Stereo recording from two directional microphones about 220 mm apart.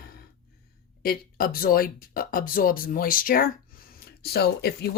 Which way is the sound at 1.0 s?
40° left (ahead or behind).